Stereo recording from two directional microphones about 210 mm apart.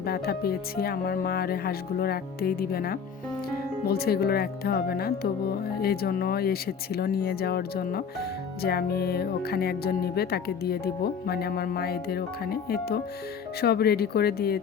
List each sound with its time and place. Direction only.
0.0 s speech: 45° left (ahead or behind)